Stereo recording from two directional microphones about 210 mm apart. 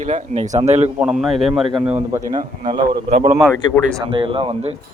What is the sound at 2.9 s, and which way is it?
Speech, 40° right (ahead or behind).